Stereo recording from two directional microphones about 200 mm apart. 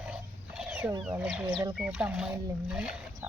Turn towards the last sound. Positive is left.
turn(degrees=-5)  # may be behind; listen again after turning